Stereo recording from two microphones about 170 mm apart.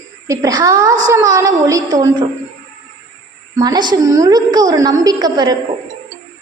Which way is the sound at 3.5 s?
20° right (ahead or behind).